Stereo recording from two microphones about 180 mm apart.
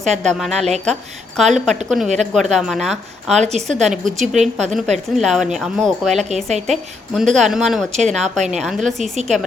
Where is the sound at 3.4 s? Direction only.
40° right (ahead or behind).